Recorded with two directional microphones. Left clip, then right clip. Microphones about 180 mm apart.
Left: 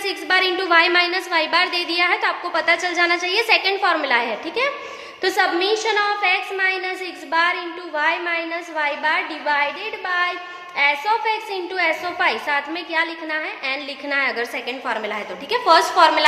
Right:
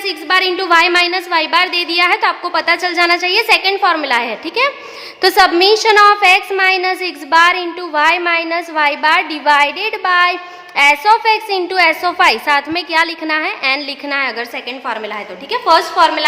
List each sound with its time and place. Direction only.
0.0 s a woman's voice: 25° right (ahead or behind)
5.2 s a woman's voice: 40° right (ahead or behind); by 16.2 s 15° right (ahead or behind)